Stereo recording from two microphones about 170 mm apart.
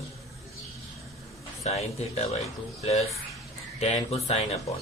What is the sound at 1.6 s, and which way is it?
Speech, 40° left (ahead or behind).